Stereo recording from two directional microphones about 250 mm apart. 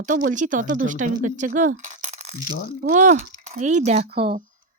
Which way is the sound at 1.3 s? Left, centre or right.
Right.